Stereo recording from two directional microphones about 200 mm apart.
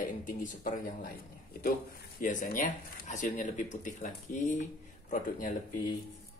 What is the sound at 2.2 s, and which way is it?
Speech, 40° left (ahead or behind).